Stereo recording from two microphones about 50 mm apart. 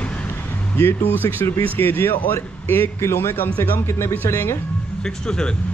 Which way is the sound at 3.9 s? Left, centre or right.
Left.